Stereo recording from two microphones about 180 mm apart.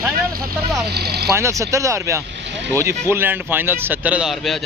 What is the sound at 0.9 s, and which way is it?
Speech, 60° right (ahead or behind).